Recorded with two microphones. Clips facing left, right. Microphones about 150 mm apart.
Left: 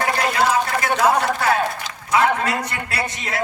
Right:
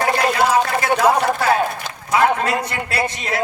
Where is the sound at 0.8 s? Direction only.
25° right (ahead or behind).